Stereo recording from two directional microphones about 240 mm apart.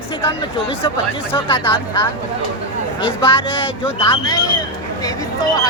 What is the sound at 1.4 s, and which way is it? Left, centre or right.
Speech, left.